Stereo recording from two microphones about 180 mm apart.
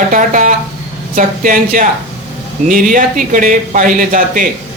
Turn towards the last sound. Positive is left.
turn(degrees=-50)  # may be behind; listen again after turning